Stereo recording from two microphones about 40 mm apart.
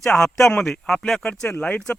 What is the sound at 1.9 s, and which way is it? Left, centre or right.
Speech, left.